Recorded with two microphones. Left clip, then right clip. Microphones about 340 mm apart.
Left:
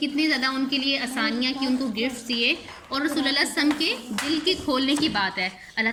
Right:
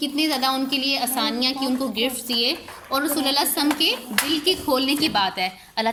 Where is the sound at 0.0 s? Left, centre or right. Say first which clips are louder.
Right 1 dB; centre.